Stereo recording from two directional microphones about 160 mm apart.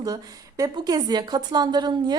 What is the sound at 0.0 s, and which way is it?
A woman's voice, 25° right (ahead or behind).